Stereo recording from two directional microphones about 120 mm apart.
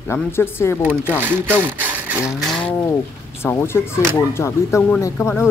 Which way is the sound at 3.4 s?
20° left (ahead or behind).